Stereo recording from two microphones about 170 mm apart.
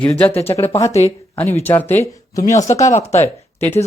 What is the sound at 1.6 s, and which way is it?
Speech, 10° left (ahead or behind).